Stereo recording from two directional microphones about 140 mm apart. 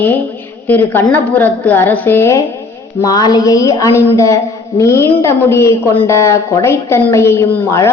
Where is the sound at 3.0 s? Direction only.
30° left (ahead or behind).